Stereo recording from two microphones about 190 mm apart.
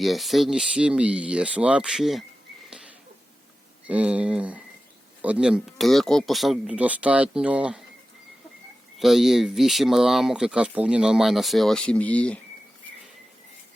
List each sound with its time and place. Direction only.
0.0 s speech: centre (ahead or behind)
3.8 s speech: 5° right (ahead or behind)
9.0 s speech: centre (ahead or behind)